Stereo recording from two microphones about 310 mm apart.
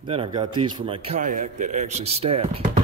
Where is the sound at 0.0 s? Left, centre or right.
Centre.